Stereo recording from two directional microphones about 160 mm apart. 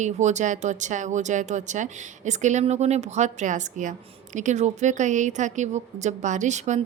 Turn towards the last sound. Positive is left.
turn(degrees=-45)  # may be behind; listen again after turning